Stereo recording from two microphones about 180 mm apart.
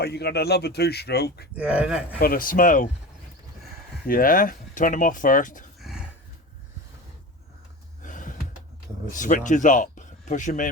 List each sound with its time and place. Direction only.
0.0 s speech: 65° left (ahead or behind)
1.5 s speech: 5° right (ahead or behind)
2.1 s speech: 55° left (ahead or behind)
4.0 s speech: 50° left (ahead or behind)
5.8 s a sound: 5° right (ahead or behind)
8.0 s gasp: 45° left (ahead or behind)
9.1 s speech: 45° left (ahead or behind)